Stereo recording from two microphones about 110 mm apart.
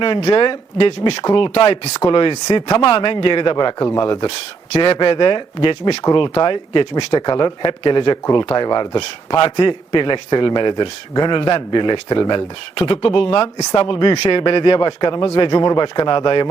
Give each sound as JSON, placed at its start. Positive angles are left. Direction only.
{"t": 0.0, "sound": "speech", "side_deg": 60}
{"t": 1.0, "sound": "speech", "side_deg": 40}
{"t": 1.4, "sound": "speech", "side_deg": 55}
{"t": 4.3, "sound": "speech", "side_deg": 60}
{"t": 12.7, "sound": "speech", "side_deg": 55}
{"t": 13.7, "sound": "speech", "side_deg": 45}